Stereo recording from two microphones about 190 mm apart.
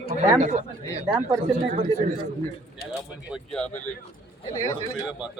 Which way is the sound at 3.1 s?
5° right (ahead or behind).